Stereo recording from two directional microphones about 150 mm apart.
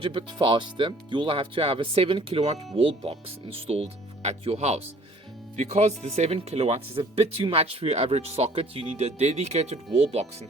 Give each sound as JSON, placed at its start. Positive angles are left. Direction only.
{"t": 0.0, "sound": "speech", "side_deg": -35}